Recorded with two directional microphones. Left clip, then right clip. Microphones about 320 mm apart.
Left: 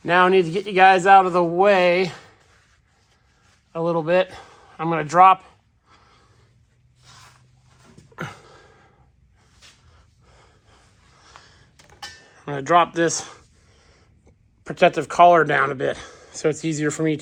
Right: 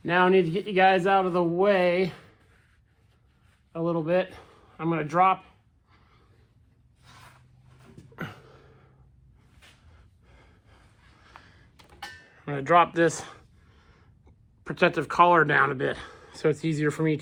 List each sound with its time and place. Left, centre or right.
0.0 s a man's voice: left
3.7 s speech: left
8.1 s a sound: left
10.2 s gasp: centre
11.3 s a sound: centre
14.6 s a man's voice: centre